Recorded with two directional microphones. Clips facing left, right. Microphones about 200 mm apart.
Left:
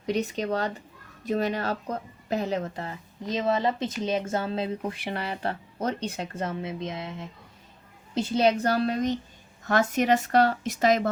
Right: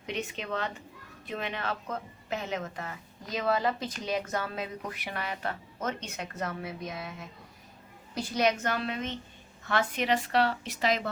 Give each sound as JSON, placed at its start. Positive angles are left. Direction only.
{"t": 0.0, "sound": "speech", "side_deg": 40}